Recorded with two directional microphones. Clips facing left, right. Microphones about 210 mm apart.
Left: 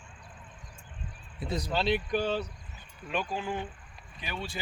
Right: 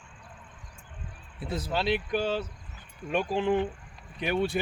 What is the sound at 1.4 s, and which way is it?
Speech, 5° right (ahead or behind).